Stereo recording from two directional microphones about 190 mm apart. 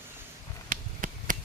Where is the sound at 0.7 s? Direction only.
45° right (ahead or behind).